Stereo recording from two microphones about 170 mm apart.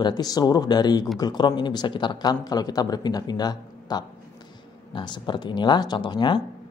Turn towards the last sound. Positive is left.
turn(degrees=25)  # may be behind; listen again after turning